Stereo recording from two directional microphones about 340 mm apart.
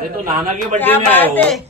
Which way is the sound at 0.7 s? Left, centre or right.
Centre.